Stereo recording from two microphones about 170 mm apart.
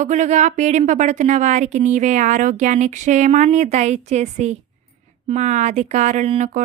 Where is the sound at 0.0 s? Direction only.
45° right (ahead or behind).